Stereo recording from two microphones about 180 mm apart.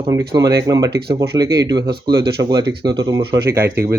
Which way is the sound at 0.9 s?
65° right (ahead or behind).